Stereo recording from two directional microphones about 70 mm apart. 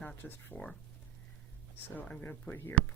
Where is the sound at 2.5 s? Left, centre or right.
Left.